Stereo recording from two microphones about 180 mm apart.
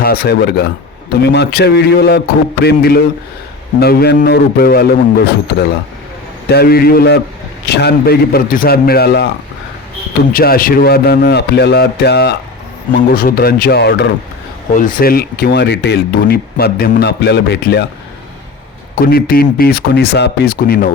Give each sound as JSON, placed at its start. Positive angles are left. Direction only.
{"t": 0.0, "sound": "speech", "side_deg": 60}
{"t": 10.3, "sound": "speech", "side_deg": 55}
{"t": 14.7, "sound": "speech", "side_deg": 50}
{"t": 19.0, "sound": "speech", "side_deg": 55}